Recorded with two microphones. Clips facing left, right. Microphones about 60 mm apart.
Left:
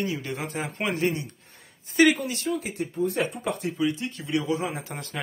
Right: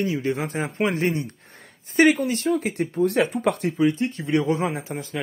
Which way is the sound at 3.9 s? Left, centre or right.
Right.